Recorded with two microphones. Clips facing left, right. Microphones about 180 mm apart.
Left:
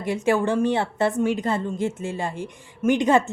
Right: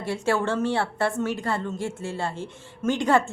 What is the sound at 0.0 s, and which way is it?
A woman's voice, 15° left (ahead or behind).